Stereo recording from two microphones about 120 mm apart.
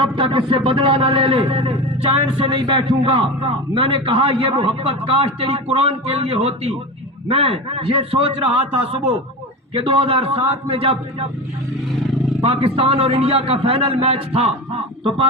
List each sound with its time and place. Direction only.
0.0 s speech: 45° right (ahead or behind)
12.4 s speech: 55° right (ahead or behind)